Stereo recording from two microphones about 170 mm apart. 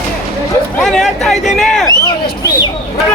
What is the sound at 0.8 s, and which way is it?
Speech, centre (ahead or behind).